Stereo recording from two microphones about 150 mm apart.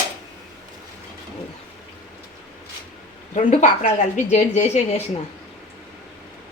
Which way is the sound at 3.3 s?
55° left (ahead or behind).